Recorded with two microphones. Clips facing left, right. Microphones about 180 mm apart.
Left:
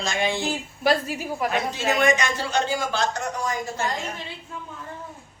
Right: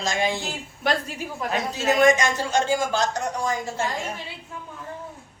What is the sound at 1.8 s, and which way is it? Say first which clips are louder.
A man's voice: right 4 dB; 45° right (ahead or behind).